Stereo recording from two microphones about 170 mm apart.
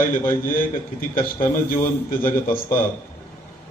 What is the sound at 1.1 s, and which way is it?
A man's voice, 55° left (ahead or behind).